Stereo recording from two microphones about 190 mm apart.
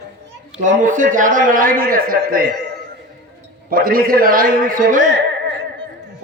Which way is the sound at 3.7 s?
50° right (ahead or behind).